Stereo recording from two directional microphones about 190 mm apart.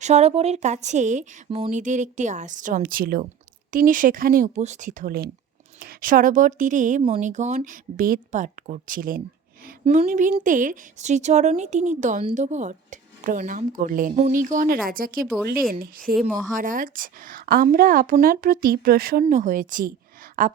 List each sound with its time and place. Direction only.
0.0 s speech: 35° right (ahead or behind)
1.5 s speech: 30° right (ahead or behind)
1.7 s a woman's voice: 40° right (ahead or behind)
9.8 s a woman's voice: 35° right (ahead or behind); by 19.2 s 50° right (ahead or behind)
19.2 s a woman's voice: 40° right (ahead or behind)